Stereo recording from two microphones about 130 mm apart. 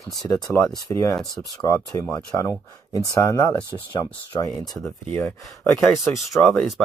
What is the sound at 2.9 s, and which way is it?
Speech, 25° left (ahead or behind).